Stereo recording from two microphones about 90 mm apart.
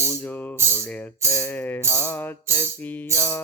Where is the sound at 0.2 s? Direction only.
20° left (ahead or behind).